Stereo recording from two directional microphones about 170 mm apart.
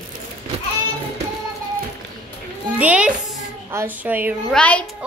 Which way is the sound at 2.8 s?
10° right (ahead or behind).